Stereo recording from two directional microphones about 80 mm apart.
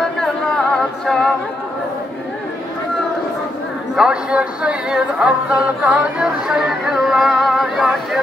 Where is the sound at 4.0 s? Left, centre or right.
Centre.